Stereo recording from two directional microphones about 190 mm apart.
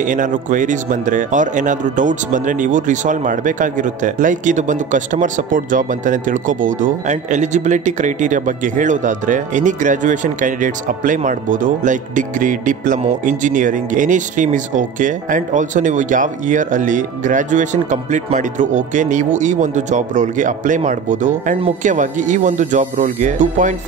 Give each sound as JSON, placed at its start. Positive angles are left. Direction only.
{"t": 0.0, "sound": "speech", "side_deg": -45}